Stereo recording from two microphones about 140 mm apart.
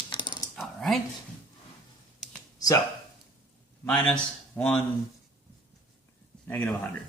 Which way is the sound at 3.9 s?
5° left (ahead or behind).